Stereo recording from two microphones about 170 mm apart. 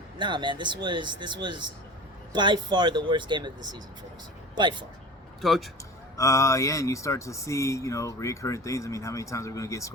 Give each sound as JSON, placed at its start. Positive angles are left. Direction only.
{"t": 0.2, "sound": "speech", "side_deg": -25}
{"t": 5.4, "sound": "a man's voice", "side_deg": 0}
{"t": 6.1, "sound": "speech", "side_deg": 20}